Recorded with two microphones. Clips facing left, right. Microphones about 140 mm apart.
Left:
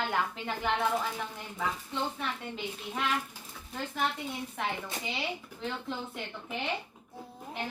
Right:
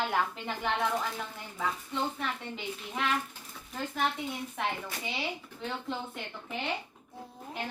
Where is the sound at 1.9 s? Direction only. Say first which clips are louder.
Right 1 dB; centre (ahead or behind).